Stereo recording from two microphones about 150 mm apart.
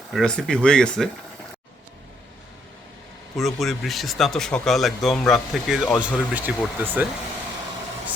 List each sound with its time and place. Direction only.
0.1 s speech: 5° left (ahead or behind)
3.3 s speech: centre (ahead or behind)